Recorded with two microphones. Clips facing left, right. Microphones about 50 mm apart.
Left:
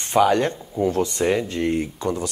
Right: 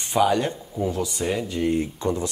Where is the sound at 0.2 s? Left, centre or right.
Centre.